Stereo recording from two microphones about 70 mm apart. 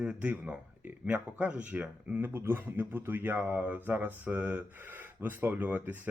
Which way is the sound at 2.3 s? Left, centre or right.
Right.